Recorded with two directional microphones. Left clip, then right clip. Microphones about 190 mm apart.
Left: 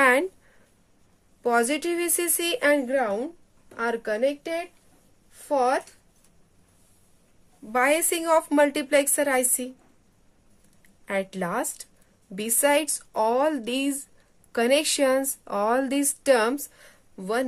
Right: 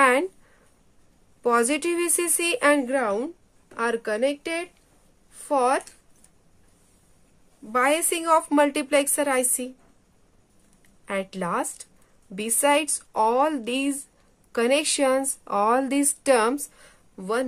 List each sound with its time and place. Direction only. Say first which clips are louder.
0.0 s a sound: right 1 dB; 10° right (ahead or behind)
1.4 s a woman's voice: right 1 dB; 15° right (ahead or behind)
7.6 s a woman's voice: even; 10° right (ahead or behind)
11.1 s a woman's voice: even; 5° right (ahead or behind)